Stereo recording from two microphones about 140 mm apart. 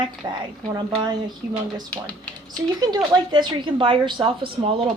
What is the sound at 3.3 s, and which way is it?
A woman's voice, 35° right (ahead or behind).